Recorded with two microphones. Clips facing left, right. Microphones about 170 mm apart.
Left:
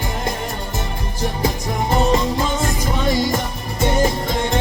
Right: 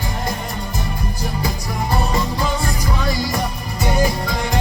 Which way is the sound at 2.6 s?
25° left (ahead or behind).